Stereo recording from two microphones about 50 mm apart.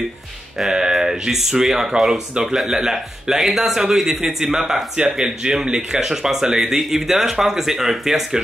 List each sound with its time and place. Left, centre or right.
0.6 s speech: centre